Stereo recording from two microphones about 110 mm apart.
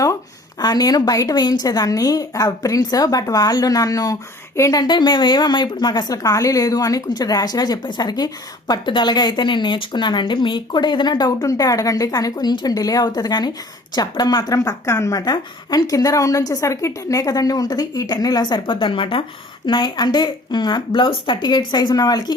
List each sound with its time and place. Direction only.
0.6 s a woman's voice: 35° left (ahead or behind); by 19.2 s 50° left (ahead or behind)
19.6 s speech: 40° left (ahead or behind)